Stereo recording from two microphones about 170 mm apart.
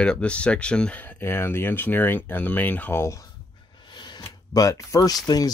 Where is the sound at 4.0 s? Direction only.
25° left (ahead or behind).